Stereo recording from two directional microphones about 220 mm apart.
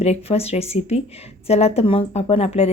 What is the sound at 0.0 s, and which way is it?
Speech, 25° left (ahead or behind).